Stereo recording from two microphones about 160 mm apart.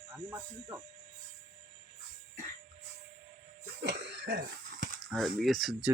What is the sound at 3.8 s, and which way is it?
Cough, 90° right.